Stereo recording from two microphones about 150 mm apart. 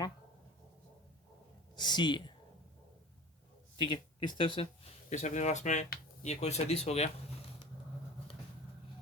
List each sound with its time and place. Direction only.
1.7 s speech: 30° left (ahead or behind)
3.8 s speech: 30° left (ahead or behind)
5.0 s speech: 50° left (ahead or behind)